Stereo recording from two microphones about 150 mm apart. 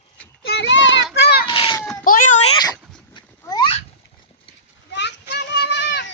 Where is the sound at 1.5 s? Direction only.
30° left (ahead or behind).